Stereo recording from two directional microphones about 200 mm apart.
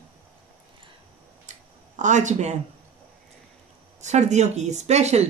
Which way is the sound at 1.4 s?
35° right (ahead or behind).